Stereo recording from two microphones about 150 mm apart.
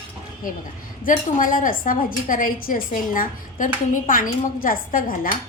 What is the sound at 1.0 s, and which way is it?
A woman's voice, 65° left (ahead or behind).